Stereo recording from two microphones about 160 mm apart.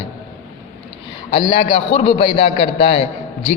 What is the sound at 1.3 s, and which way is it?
A man's voice, 30° left (ahead or behind).